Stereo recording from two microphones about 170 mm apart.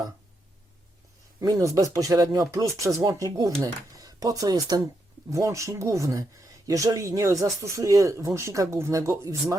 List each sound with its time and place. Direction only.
1.4 s speech: 20° right (ahead or behind)